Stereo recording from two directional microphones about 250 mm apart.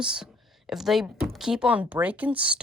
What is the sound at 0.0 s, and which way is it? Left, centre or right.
Speech, centre.